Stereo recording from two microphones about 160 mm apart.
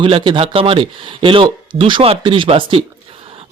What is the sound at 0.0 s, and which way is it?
A man's voice, 35° right (ahead or behind).